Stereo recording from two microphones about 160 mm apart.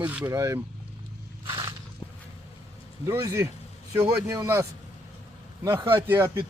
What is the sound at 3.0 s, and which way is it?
A man's voice, 20° right (ahead or behind).